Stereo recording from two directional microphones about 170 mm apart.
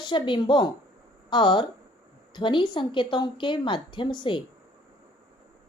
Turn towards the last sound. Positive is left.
turn(degrees=25)  # may be behind; listen again after turning